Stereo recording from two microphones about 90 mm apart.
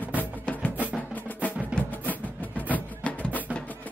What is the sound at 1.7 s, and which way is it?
Music, 15° right (ahead or behind).